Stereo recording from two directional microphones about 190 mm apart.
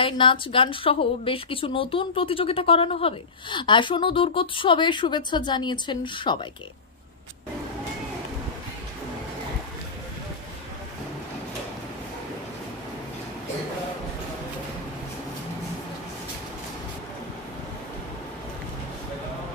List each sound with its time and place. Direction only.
0.0 s a woman's voice: 25° left (ahead or behind)